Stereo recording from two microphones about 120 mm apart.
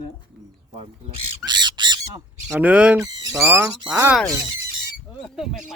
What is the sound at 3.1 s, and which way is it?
Speech, 25° right (ahead or behind).